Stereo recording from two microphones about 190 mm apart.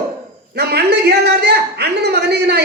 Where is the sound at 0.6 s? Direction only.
60° right (ahead or behind).